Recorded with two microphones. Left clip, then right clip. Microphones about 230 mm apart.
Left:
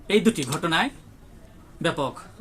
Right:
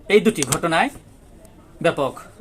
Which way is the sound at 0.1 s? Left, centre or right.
Left.